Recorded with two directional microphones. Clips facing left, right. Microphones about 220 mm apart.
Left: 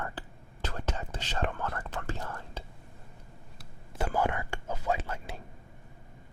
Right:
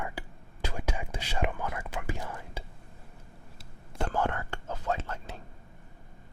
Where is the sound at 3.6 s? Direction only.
5° left (ahead or behind).